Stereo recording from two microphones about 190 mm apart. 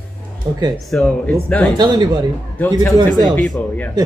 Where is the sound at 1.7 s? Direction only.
20° right (ahead or behind).